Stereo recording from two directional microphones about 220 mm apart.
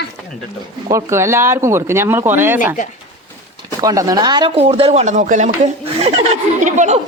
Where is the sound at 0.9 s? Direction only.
10° right (ahead or behind).